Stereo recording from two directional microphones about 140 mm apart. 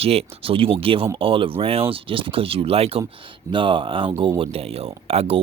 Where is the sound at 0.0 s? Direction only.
45° right (ahead or behind).